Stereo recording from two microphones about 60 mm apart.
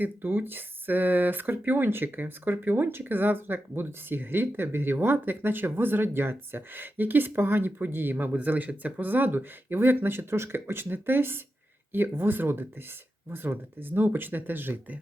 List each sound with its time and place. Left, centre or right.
0.0 s speech: right